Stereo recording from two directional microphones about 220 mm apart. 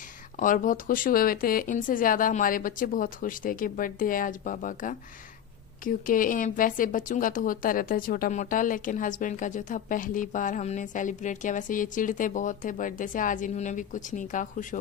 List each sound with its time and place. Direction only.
0.4 s speech: 40° left (ahead or behind)